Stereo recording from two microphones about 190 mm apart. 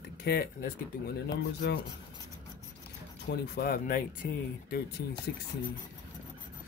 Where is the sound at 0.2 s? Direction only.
55° left (ahead or behind).